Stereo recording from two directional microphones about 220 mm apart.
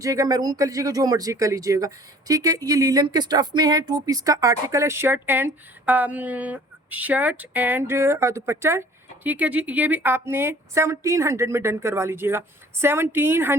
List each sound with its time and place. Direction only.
0.0 s speech: 15° right (ahead or behind)